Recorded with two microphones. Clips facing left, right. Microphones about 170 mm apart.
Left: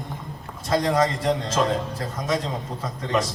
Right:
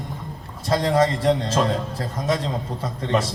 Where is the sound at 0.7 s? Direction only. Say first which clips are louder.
Right 2 dB; 30° right (ahead or behind).